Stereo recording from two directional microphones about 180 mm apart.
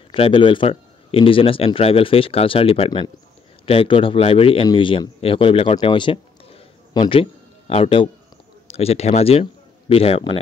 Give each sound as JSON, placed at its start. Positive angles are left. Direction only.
{"t": 0.1, "sound": "a man's voice", "side_deg": 30}